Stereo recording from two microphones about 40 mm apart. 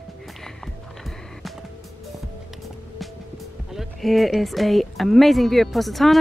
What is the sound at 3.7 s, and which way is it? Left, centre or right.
Speech, centre.